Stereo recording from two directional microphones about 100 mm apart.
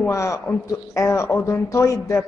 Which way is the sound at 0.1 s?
30° left (ahead or behind).